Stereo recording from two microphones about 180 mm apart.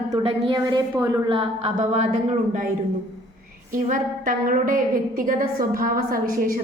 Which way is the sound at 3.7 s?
45° right (ahead or behind).